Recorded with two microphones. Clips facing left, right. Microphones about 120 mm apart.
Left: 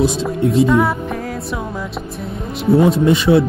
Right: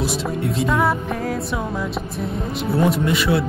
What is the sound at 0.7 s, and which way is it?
Music, centre (ahead or behind).